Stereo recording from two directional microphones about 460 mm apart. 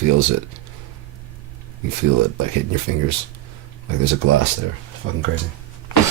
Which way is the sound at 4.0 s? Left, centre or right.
Right.